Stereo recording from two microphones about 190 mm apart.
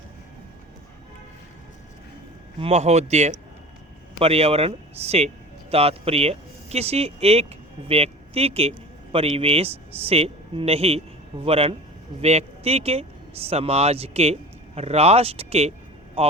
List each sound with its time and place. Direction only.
2.6 s speech: 35° right (ahead or behind)